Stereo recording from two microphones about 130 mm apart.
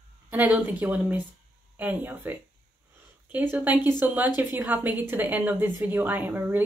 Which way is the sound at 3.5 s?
15° right (ahead or behind).